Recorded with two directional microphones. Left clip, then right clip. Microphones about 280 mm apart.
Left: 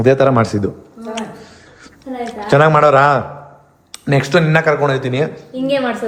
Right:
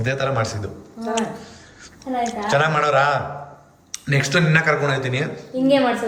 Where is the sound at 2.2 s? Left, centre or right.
Centre.